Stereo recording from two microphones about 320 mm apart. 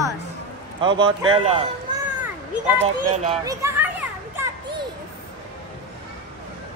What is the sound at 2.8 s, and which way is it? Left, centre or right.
Speech, centre.